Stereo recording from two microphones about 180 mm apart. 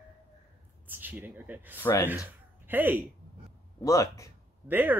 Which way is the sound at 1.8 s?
15° left (ahead or behind).